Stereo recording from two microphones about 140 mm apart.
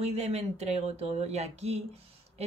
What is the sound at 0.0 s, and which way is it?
Speech, 50° right (ahead or behind).